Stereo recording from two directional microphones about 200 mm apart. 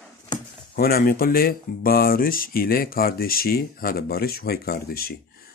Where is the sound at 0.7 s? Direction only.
50° left (ahead or behind).